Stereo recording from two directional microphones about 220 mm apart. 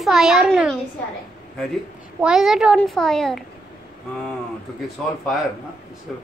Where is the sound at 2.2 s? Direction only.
5° right (ahead or behind).